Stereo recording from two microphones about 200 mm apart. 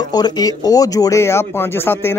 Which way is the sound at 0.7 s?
20° left (ahead or behind).